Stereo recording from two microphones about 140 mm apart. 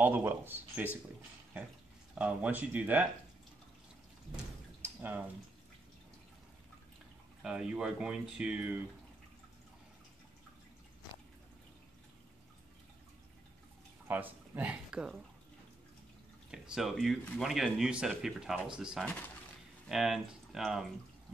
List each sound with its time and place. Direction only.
0.0 s speech: 15° right (ahead or behind)
2.1 s speech: 10° right (ahead or behind)
4.8 s a sound: 15° right (ahead or behind)
7.4 s speech: 5° right (ahead or behind)
14.0 s speech: 15° right (ahead or behind)
16.4 s speech: 5° right (ahead or behind)
19.0 s speech: 10° left (ahead or behind)
19.9 s speech: 5° right (ahead or behind)